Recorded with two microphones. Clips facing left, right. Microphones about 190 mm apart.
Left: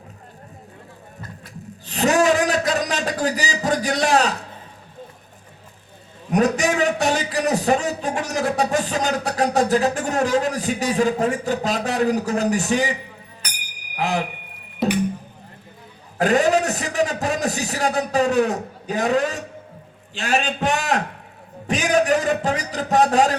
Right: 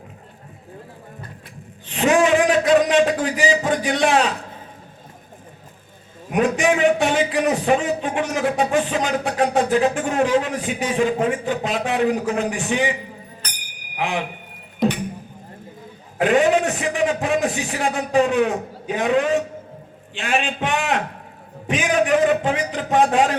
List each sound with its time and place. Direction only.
1.9 s a sound: 40° left (ahead or behind)
6.3 s a man's voice: 40° left (ahead or behind)
14.0 s a man's voice: 40° left (ahead or behind)
16.1 s a man's voice: 40° left (ahead or behind)